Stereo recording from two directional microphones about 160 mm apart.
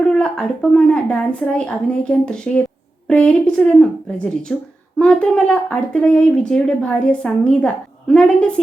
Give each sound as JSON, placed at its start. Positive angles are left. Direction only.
{"t": 0.0, "sound": "a woman's voice", "side_deg": 5}